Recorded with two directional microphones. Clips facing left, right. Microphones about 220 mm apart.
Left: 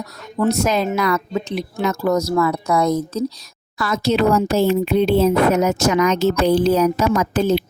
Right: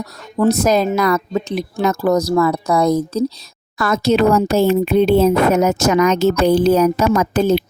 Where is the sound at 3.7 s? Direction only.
50° right (ahead or behind).